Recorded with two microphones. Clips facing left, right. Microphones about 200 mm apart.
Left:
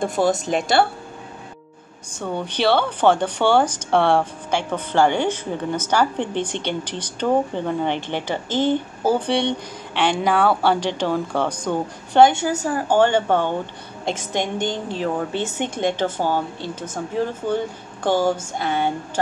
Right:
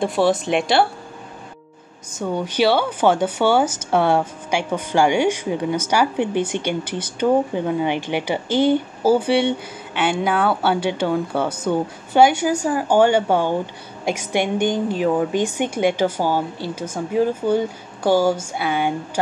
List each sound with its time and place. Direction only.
0.0 s a woman's voice: centre (ahead or behind)
0.4 s a woman's voice: 45° left (ahead or behind)
2.1 s speech: 10° right (ahead or behind)